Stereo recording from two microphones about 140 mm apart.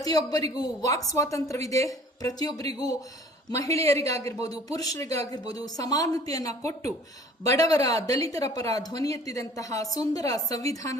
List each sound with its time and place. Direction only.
0.0 s speech: 25° left (ahead or behind)